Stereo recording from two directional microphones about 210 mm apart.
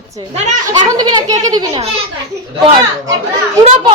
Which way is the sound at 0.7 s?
15° right (ahead or behind).